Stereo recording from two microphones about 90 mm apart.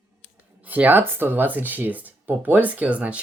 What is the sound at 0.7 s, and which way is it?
Speech, 20° right (ahead or behind).